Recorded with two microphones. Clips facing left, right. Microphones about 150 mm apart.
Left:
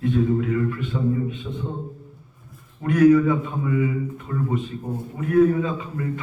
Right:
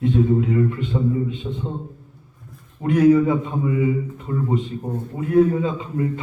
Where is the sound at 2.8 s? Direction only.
25° right (ahead or behind).